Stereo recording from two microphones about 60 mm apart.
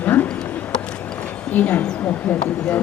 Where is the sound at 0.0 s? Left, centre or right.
Left.